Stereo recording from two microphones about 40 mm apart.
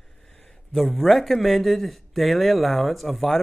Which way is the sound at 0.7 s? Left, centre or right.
Centre.